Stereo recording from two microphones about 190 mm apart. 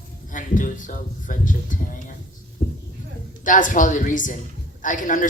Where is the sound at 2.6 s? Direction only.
40° left (ahead or behind).